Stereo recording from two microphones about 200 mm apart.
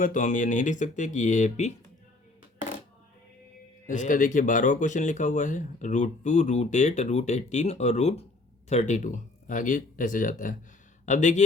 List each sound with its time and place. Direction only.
0.0 s speech: 40° left (ahead or behind)
3.8 s speech: 40° left (ahead or behind)